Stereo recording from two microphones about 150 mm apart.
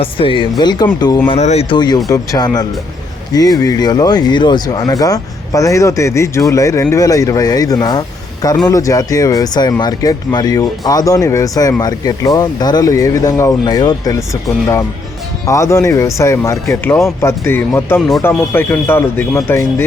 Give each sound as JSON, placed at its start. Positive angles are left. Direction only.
{"t": 0.0, "sound": "speech", "side_deg": 35}
{"t": 1.3, "sound": "speech", "side_deg": 45}
{"t": 1.7, "sound": "speech", "side_deg": 30}